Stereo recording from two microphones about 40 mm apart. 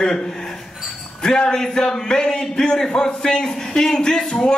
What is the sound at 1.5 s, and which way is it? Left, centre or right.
A man's voice, centre.